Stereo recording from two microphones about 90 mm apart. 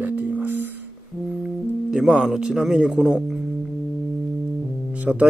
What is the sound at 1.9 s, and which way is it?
Speech, 5° right (ahead or behind).